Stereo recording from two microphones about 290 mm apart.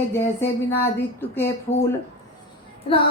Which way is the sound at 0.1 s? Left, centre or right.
Centre.